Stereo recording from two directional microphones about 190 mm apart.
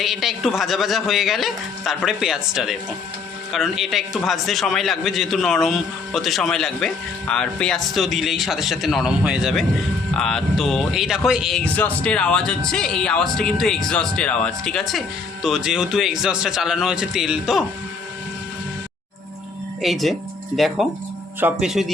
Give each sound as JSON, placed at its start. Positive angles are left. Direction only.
{"t": 0.0, "sound": "speech", "side_deg": 0}
{"t": 19.8, "sound": "speech", "side_deg": 0}